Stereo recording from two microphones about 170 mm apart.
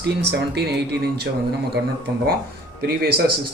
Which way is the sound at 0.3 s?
80° right.